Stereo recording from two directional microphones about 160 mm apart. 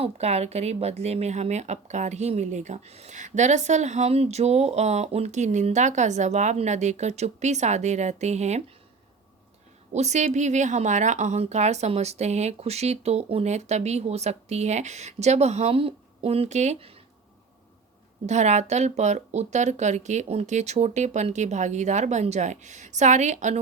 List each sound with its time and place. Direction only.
0.0 s speech: 40° right (ahead or behind)
9.9 s speech: 45° right (ahead or behind)
18.3 s speech: 45° right (ahead or behind)